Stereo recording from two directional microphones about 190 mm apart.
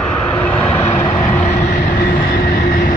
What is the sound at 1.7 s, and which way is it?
Vehicle, 50° left (ahead or behind).